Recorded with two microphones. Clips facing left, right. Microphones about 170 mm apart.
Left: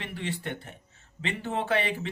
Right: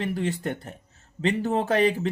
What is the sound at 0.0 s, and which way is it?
Speech, 40° right (ahead or behind).